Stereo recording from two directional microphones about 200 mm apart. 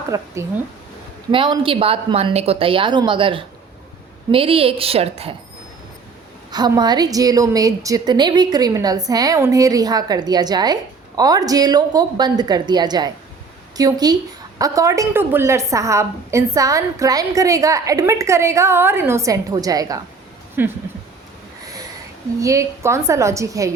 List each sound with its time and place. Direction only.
0.1 s a woman's voice: 15° right (ahead or behind)
1.3 s a woman's voice: 25° right (ahead or behind)
6.5 s a woman's voice: 20° right (ahead or behind)
22.4 s a woman's voice: 15° right (ahead or behind)